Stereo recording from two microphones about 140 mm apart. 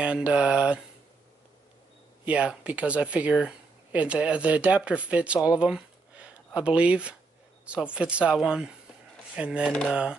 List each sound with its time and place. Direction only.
0.0 s speech: 10° right (ahead or behind)
2.2 s speech: 10° right (ahead or behind)
9.7 s speech: 5° left (ahead or behind)